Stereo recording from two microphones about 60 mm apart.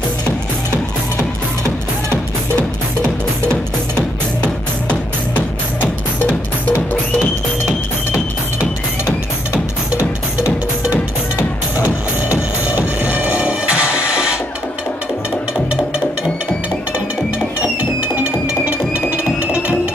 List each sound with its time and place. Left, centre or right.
5.3 s music: left
9.9 s music: left
12.7 s music: right
17.6 s music: right